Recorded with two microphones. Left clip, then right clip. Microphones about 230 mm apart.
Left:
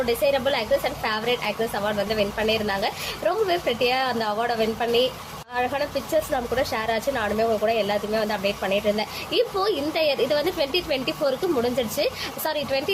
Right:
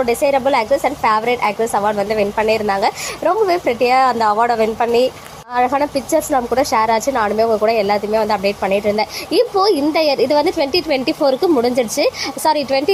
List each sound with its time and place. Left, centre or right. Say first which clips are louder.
0.0 s a woman's voice: right 7 dB; right